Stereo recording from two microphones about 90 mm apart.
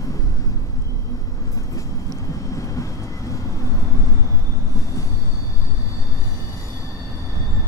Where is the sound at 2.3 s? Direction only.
40° left (ahead or behind).